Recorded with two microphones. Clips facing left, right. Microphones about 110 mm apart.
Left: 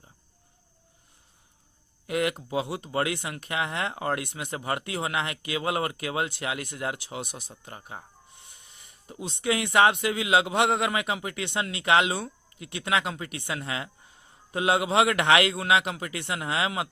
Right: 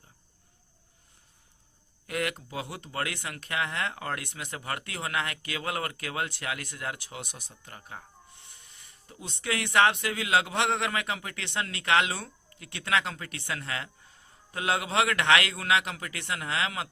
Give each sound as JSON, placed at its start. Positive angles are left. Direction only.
{"t": 2.0, "sound": "speech", "side_deg": 20}
{"t": 9.0, "sound": "speech", "side_deg": 20}